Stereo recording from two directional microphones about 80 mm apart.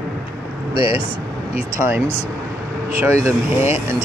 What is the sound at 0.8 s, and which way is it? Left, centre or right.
Speech, left.